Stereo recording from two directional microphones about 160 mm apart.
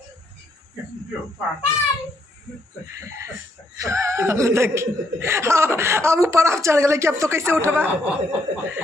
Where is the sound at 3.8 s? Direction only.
20° right (ahead or behind).